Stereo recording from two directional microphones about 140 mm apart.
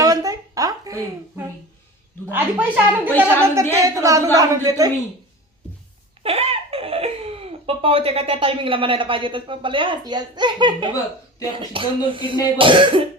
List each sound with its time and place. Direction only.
0.0 s a sound: 25° right (ahead or behind)
2.3 s a child's voice: 15° right (ahead or behind)
6.2 s speech: 45° right (ahead or behind)